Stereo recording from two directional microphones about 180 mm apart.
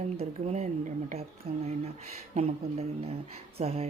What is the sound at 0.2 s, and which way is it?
Speech, 35° right (ahead or behind).